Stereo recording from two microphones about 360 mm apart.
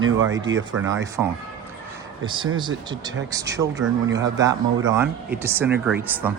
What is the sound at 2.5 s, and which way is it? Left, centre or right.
A man's voice, centre.